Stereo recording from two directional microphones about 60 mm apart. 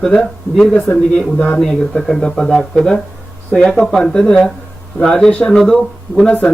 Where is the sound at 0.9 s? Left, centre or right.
Left.